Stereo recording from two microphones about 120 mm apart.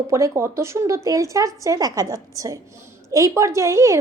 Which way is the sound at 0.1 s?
25° right (ahead or behind).